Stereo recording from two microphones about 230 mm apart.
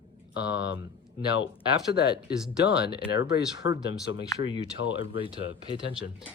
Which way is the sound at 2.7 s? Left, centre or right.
Left.